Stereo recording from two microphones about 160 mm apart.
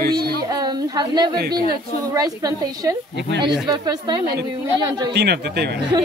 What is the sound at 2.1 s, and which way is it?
A woman's voice, 25° right (ahead or behind).